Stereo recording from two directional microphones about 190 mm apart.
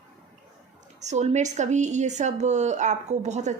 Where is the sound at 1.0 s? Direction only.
35° right (ahead or behind).